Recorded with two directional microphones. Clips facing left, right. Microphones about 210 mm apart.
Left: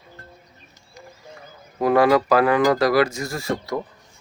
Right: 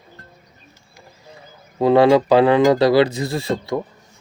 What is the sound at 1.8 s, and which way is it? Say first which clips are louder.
Speech: right 4 dB; 25° right (ahead or behind).